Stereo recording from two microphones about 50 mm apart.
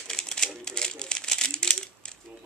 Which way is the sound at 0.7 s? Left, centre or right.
Centre.